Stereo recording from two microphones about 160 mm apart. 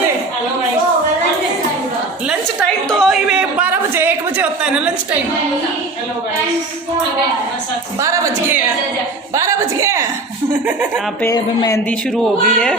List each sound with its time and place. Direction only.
2.2 s a sound: 5° right (ahead or behind)
7.9 s a woman's voice: 20° right (ahead or behind)
11.2 s speech: 20° left (ahead or behind)
11.9 s speech: 5° left (ahead or behind)